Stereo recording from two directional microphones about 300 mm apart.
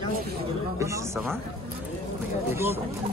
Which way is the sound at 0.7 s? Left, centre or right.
Centre.